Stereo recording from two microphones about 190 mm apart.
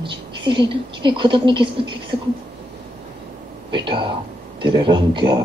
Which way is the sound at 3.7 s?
25° right (ahead or behind).